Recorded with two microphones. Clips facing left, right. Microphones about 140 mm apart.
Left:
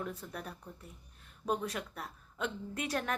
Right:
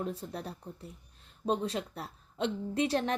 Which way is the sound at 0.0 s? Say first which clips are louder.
Right 4 dB; 30° right (ahead or behind).